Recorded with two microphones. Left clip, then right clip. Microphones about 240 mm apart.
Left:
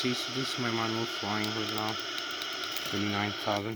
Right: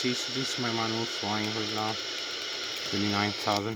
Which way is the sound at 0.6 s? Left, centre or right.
Centre.